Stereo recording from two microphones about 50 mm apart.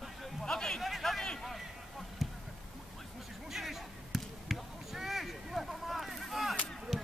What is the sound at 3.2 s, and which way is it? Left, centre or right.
Basketball bounce, centre.